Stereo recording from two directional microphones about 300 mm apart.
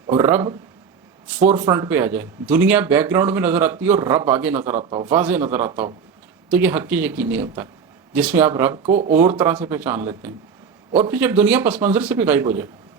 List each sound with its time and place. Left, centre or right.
0.1 s speech: centre
4.8 s speech: centre
8.9 s speech: right
9.4 s speech: centre